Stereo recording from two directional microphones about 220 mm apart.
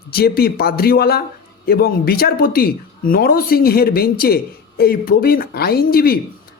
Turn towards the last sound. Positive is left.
turn(degrees=45)  # may be behind; listen again after turning